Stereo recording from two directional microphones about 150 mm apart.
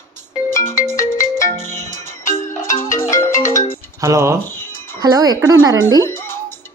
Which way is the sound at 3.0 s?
20° left (ahead or behind).